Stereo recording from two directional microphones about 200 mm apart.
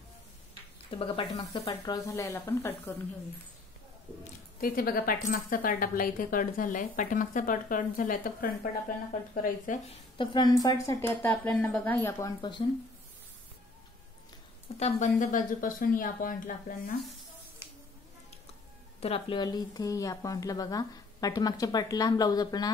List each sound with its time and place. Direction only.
0.9 s a woman's voice: 25° left (ahead or behind); by 2.9 s 10° left (ahead or behind)
4.6 s speech: 45° left (ahead or behind)
10.1 s a woman's voice: 25° left (ahead or behind)
14.8 s speech: 40° left (ahead or behind)
18.9 s speech: 30° left (ahead or behind)